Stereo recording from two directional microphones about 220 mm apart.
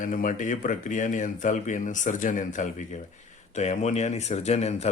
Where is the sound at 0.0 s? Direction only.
40° left (ahead or behind).